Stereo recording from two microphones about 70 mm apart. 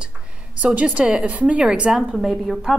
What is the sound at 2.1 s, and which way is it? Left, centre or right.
Speech, centre.